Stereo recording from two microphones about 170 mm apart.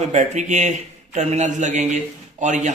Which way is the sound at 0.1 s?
45° right (ahead or behind).